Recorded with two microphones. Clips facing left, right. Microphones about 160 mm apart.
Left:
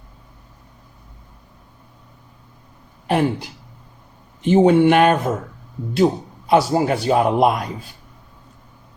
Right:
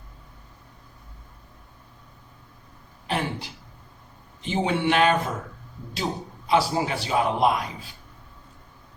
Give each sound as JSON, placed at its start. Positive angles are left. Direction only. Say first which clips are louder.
{"t": 3.1, "sound": "a man's voice", "louder": "left 9 dB", "side_deg": 50}
{"t": 6.5, "sound": "a man's voice", "louder": "left 6 dB", "side_deg": 50}